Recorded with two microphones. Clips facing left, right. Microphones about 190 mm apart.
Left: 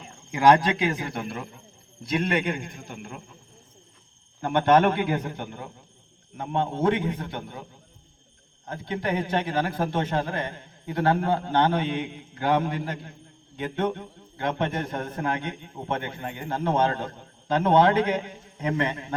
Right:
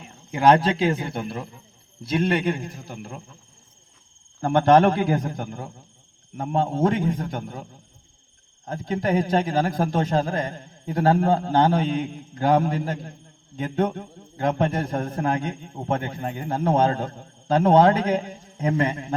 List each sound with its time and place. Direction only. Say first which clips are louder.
0.3 s a man's voice: right 1 dB; 25° right (ahead or behind)
4.4 s a man's voice: right 3 dB; 35° right (ahead or behind)
8.6 s a man's voice: right 4 dB; 40° right (ahead or behind)